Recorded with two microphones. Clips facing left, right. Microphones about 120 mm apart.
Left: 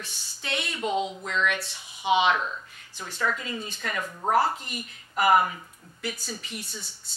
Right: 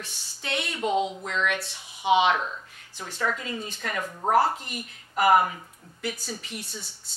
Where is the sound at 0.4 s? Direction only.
50° right (ahead or behind).